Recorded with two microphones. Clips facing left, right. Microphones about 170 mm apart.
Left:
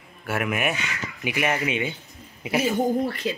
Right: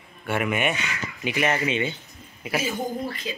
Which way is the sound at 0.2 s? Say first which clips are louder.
Right 1 dB; centre (ahead or behind).